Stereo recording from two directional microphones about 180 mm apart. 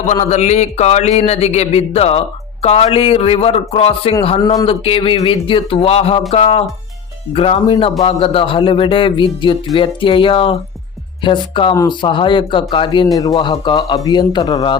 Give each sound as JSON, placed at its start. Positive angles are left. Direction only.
{"t": 0.1, "sound": "a man's voice", "side_deg": 40}